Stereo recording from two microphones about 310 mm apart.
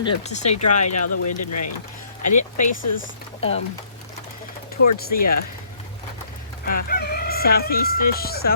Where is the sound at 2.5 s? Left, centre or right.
Left.